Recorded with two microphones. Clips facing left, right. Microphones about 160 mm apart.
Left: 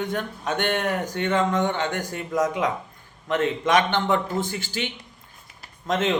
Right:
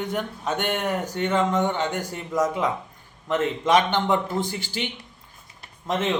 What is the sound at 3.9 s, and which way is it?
A man's voice, 15° right (ahead or behind).